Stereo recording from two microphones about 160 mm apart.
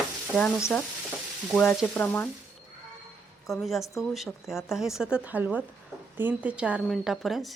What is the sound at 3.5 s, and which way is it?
Speech, centre (ahead or behind).